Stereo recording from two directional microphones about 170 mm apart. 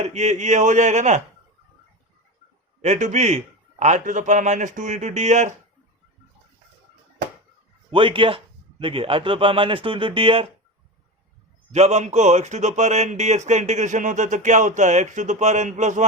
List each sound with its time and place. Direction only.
0.0 s a man's voice: 40° right (ahead or behind)
2.8 s a man's voice: 45° right (ahead or behind)
7.9 s speech: 30° right (ahead or behind)
11.7 s a man's voice: 40° right (ahead or behind)